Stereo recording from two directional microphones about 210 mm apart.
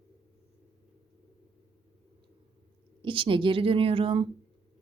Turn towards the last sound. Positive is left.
turn(degrees=-25)  # may be behind; listen again after turning